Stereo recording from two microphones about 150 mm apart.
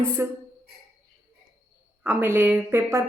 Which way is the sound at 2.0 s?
10° right (ahead or behind).